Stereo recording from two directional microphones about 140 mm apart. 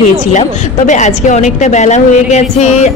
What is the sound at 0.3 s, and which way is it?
A woman's voice, 60° left (ahead or behind).